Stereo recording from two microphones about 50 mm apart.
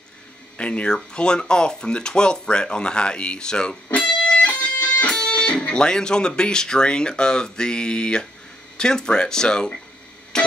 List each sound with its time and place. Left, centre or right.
0.6 s speech: left
10.3 s music: centre